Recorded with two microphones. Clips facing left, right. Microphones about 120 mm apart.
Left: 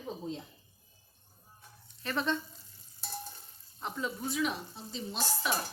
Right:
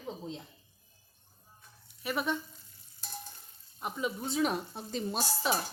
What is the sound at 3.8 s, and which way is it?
Speech, 15° right (ahead or behind).